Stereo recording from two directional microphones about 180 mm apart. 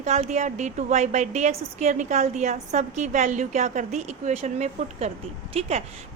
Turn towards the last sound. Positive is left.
turn(degrees=-35)  # may be behind; listen again after turning